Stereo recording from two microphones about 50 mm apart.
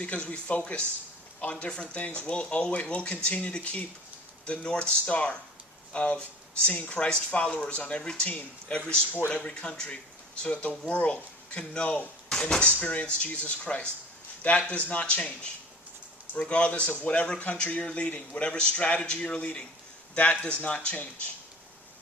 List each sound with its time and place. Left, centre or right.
0.0 s a man's voice: left
9.3 s a man's voice: left
12.6 s a man's voice: left
16.3 s a man's voice: left